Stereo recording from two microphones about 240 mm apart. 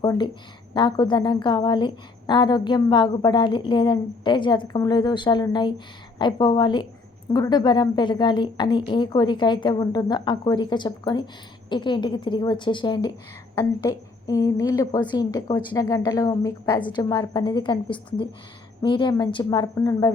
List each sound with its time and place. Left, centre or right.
0.0 s a woman's voice: centre